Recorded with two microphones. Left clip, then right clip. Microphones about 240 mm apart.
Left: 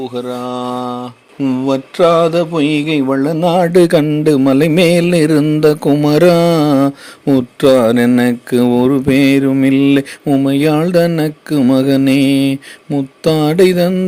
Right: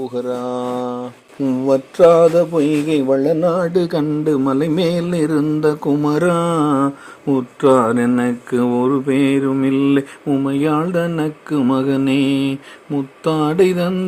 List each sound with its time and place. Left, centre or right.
0.0 s speech: centre; by 3.0 s left
3.5 s a sound: left
4.4 s music: left
5.9 s mantra: left
7.3 s speech: left